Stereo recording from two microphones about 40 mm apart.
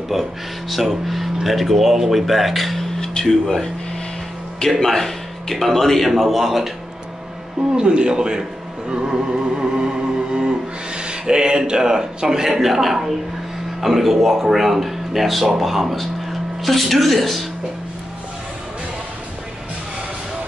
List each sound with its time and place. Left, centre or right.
0.1 s speech: centre
3.0 s music: centre
4.7 s speech: centre
7.7 s speech: right; by 17.5 s centre